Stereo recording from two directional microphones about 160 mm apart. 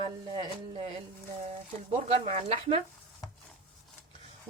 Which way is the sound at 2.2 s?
40° right (ahead or behind).